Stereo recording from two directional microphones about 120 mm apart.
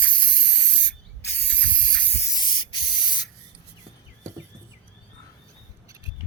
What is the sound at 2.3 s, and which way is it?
Spray, 40° left (ahead or behind).